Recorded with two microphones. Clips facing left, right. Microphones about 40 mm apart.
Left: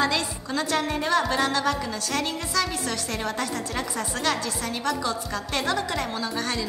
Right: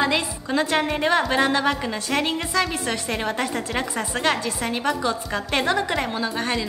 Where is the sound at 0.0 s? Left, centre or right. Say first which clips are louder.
Right 2 dB; right.